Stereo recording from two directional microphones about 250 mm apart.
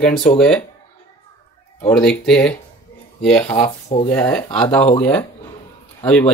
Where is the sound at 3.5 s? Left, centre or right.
Left.